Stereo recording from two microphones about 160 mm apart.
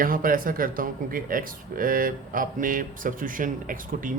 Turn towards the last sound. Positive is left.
turn(degrees=-55)  # may be behind; listen again after turning